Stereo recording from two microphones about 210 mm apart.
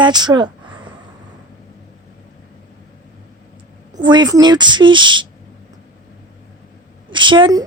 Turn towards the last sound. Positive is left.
turn(degrees=-20)  # may be behind; listen again after turning